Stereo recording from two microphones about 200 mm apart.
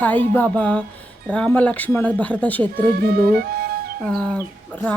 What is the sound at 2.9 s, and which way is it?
Music, 50° right (ahead or behind).